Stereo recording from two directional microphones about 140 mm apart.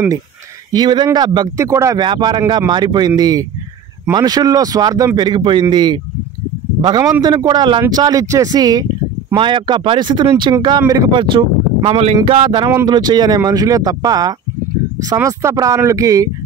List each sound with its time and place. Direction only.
0.7 s a man's voice: 30° right (ahead or behind)